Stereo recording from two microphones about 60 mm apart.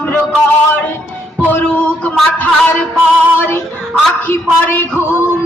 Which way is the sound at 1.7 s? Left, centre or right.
Left.